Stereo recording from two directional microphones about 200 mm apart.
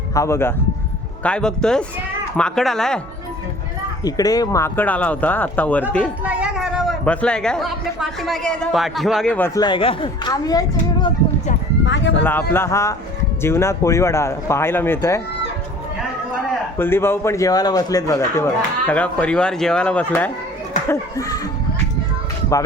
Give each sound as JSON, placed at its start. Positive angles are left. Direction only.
{"t": 0.1, "sound": "speech", "side_deg": 15}
{"t": 4.0, "sound": "speech", "side_deg": 20}
{"t": 6.2, "sound": "speech", "side_deg": -5}
{"t": 9.6, "sound": "speech", "side_deg": 25}
{"t": 12.2, "sound": "speech", "side_deg": 10}
{"t": 16.7, "sound": "speech", "side_deg": 10}